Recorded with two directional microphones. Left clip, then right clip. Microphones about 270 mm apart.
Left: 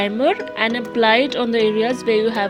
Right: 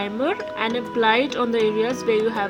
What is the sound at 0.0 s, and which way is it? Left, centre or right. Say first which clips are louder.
Speech: left 6 dB; left.